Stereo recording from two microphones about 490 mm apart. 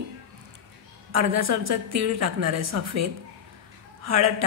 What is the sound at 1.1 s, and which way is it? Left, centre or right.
A woman's voice, right.